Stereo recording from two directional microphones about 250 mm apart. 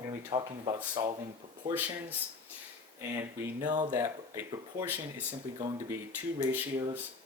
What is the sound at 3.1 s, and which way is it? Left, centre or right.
Speech, centre.